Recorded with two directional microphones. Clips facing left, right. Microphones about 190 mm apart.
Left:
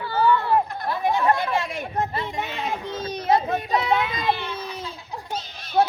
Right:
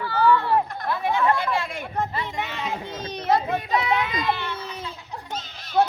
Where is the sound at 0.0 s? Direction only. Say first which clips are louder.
Right 1 dB; 25° left (ahead or behind).